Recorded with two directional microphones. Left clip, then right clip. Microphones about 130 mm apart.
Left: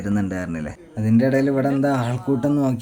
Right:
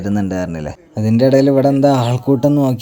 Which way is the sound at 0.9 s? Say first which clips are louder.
Right 7 dB; 45° right (ahead or behind).